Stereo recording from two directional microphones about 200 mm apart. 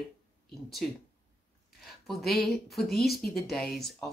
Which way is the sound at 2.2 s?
Centre (ahead or behind).